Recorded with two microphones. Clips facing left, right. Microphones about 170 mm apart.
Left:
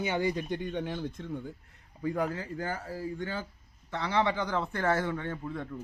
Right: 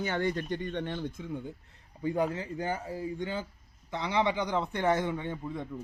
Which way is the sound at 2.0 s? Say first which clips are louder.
Right 1 dB; 25° right (ahead or behind).